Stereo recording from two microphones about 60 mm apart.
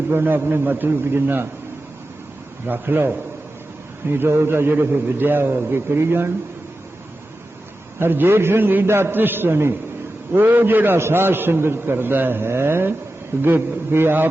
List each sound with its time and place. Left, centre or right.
0.1 s a man's voice: right
2.6 s a man's voice: right
7.9 s a man's voice: right